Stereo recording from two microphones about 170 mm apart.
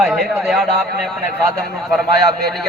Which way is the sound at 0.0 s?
Centre (ahead or behind).